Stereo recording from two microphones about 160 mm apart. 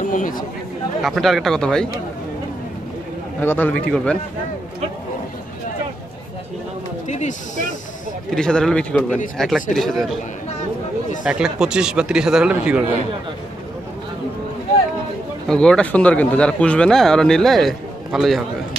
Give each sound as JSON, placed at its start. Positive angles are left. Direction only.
{"t": 0.1, "sound": "speech", "side_deg": 55}
{"t": 1.0, "sound": "speech", "side_deg": 0}
{"t": 3.3, "sound": "a man's voice", "side_deg": 10}
{"t": 7.1, "sound": "speech", "side_deg": 50}
{"t": 8.4, "sound": "speech", "side_deg": 5}
{"t": 11.2, "sound": "speech", "side_deg": -5}
{"t": 15.4, "sound": "speech", "side_deg": 5}